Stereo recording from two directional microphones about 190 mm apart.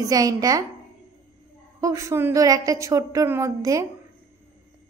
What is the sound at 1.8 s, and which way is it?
A woman's voice, 15° right (ahead or behind).